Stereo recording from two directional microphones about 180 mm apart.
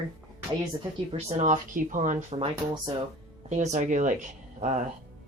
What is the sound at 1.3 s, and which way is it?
Speech, 40° right (ahead or behind).